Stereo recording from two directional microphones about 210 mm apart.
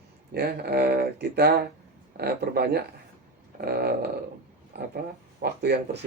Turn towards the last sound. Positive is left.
turn(degrees=-50)  # may be behind; listen again after turning